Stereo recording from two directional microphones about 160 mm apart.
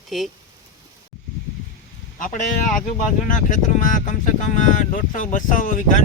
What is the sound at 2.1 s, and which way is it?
Speech, 55° left (ahead or behind).